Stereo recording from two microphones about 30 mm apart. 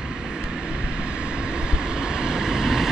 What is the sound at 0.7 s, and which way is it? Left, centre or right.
Vehicle, right.